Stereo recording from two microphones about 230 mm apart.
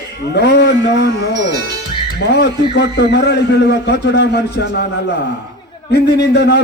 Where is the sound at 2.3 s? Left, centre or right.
Left.